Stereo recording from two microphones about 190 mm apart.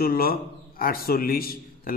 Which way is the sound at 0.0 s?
50° left (ahead or behind).